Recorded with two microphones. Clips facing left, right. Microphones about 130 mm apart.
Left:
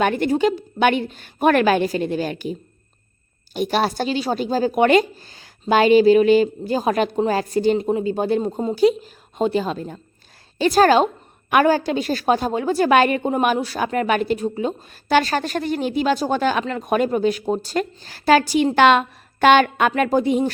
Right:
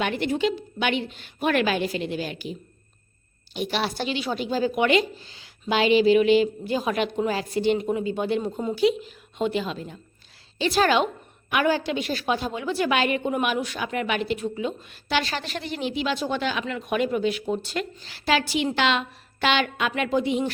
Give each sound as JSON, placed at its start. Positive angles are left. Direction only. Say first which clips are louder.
{"t": 0.0, "sound": "a woman's voice", "louder": "left 6 dB", "side_deg": 45}